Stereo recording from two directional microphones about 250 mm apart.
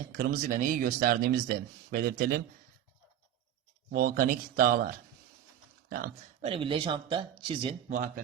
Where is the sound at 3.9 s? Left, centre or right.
Right.